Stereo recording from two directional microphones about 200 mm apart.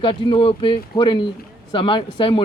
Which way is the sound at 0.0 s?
25° left (ahead or behind).